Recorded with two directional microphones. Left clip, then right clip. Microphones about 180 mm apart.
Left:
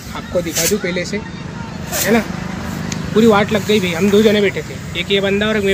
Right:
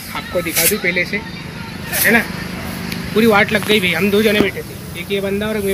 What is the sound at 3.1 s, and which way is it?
Speech, 15° left (ahead or behind).